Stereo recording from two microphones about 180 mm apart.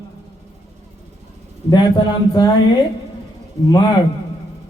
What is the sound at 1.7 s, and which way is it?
Speech, 25° left (ahead or behind).